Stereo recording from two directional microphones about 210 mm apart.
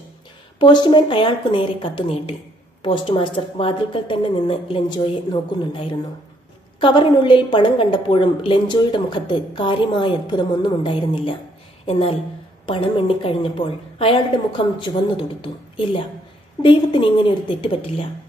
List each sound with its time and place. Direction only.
0.6 s a woman's voice: 20° left (ahead or behind)